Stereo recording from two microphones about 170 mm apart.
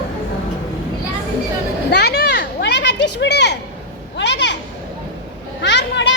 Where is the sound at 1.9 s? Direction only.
75° left (ahead or behind); by 4.5 s 90° left.